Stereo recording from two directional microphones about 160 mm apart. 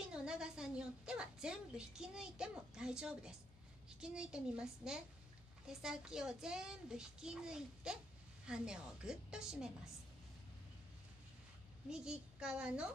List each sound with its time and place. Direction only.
0.1 s a woman's voice: 5° right (ahead or behind)
11.9 s a child's voice: 5° right (ahead or behind)